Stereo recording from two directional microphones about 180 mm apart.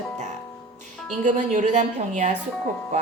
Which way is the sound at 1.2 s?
40° right (ahead or behind).